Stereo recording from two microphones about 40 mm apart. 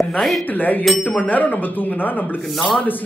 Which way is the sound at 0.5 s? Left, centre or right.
Left.